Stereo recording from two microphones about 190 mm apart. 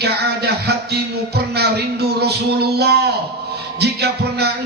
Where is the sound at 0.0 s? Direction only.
60° right (ahead or behind).